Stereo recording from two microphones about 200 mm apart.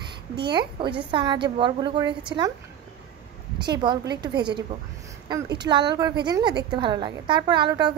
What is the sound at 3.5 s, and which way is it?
Speech, 20° right (ahead or behind).